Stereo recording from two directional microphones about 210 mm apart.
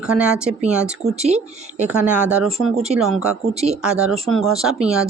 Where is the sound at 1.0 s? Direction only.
30° right (ahead or behind).